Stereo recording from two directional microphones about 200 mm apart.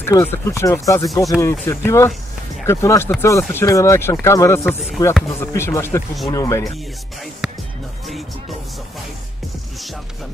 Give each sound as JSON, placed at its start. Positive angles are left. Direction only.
{"t": 0.0, "sound": "speech", "side_deg": 10}